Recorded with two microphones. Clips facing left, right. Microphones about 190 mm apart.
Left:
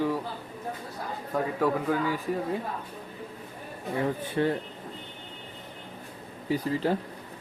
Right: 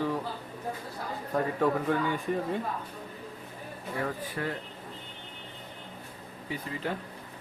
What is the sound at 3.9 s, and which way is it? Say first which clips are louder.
Speech: left 6 dB; 25° left (ahead or behind).